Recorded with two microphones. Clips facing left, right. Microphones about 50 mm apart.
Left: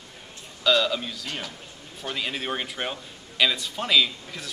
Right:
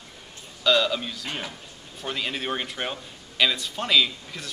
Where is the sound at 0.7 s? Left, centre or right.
Centre.